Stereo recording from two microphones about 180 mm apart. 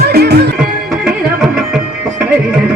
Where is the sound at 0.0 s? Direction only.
65° right (ahead or behind).